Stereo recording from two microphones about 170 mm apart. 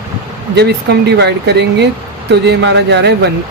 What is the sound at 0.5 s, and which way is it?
Speech, 80° right.